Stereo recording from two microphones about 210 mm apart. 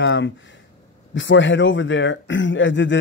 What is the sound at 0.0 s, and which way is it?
Speech, 60° left (ahead or behind).